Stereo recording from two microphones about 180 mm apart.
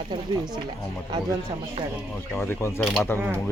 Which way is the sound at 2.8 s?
Centre (ahead or behind).